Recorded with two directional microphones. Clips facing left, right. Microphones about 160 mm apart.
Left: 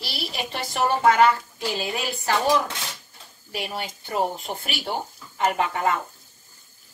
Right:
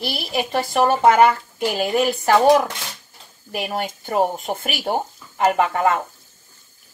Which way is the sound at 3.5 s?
50° right (ahead or behind).